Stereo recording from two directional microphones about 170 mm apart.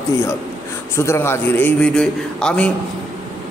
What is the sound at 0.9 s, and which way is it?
A man's voice, 15° left (ahead or behind).